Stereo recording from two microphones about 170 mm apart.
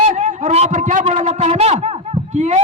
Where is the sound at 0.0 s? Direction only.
50° right (ahead or behind).